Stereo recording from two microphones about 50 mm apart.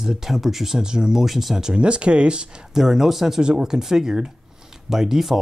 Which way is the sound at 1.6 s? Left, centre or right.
Centre.